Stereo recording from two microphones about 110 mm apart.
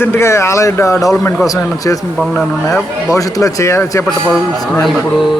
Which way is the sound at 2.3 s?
20° left (ahead or behind).